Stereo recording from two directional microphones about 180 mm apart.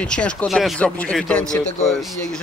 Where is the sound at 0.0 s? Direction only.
5° left (ahead or behind).